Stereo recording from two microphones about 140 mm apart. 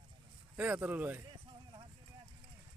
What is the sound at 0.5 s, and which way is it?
Speech, 10° right (ahead or behind).